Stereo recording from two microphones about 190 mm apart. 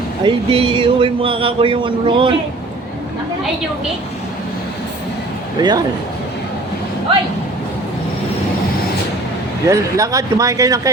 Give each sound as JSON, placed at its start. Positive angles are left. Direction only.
{"t": 0.3, "sound": "speech", "side_deg": -30}
{"t": 5.5, "sound": "speech", "side_deg": -20}
{"t": 9.6, "sound": "speech", "side_deg": -15}